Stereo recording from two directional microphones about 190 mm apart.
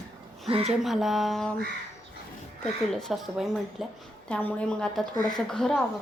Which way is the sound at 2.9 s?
Centre (ahead or behind).